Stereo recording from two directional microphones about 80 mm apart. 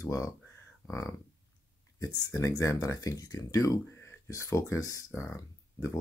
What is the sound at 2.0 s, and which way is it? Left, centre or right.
Speech, left.